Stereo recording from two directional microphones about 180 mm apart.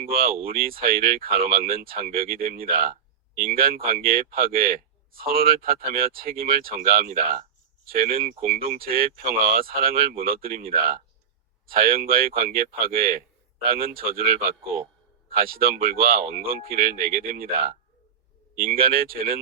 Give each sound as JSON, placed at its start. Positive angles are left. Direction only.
{"t": 0.0, "sound": "speech", "side_deg": -55}
{"t": 11.7, "sound": "speech", "side_deg": -55}